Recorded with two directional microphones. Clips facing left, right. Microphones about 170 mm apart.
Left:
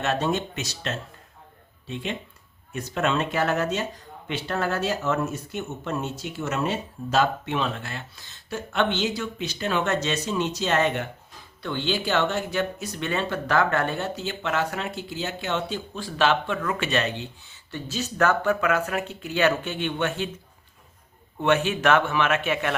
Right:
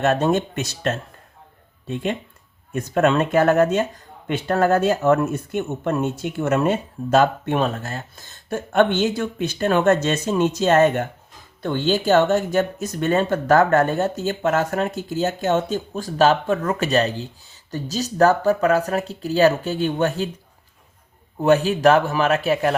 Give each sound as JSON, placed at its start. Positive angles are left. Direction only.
{"t": 0.0, "sound": "speech", "side_deg": -50}
{"t": 21.3, "sound": "a man's voice", "side_deg": -35}